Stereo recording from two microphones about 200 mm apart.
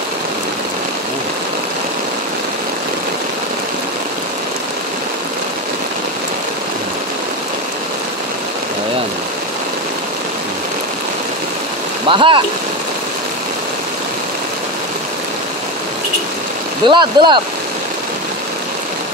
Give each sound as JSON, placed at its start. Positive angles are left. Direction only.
{"t": 12.1, "sound": "speech", "side_deg": -25}
{"t": 16.8, "sound": "speech", "side_deg": -20}